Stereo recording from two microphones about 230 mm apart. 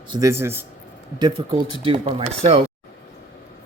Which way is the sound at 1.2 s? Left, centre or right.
Right.